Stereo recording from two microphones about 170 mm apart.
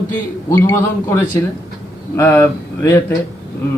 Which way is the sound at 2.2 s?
15° left (ahead or behind).